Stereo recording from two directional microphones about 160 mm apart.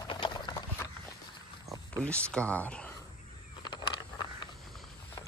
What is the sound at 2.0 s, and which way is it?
Speech, 10° left (ahead or behind).